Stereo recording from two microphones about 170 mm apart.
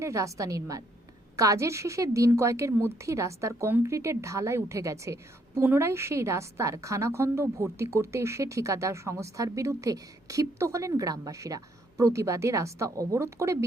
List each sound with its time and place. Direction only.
0.0 s a woman's voice: 20° right (ahead or behind)